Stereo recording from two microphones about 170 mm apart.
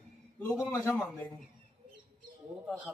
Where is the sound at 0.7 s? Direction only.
15° left (ahead or behind).